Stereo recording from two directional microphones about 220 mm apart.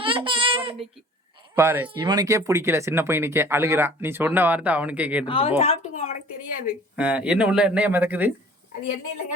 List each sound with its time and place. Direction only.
0.0 s a sound: 25° right (ahead or behind)
1.5 s speech: 10° right (ahead or behind)
5.2 s speech: 25° left (ahead or behind)
6.9 s speech: 5° right (ahead or behind)